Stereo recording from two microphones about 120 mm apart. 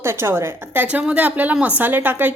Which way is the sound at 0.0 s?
20° right (ahead or behind).